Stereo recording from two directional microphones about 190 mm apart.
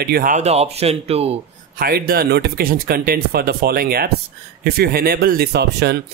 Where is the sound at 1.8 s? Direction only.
55° right (ahead or behind).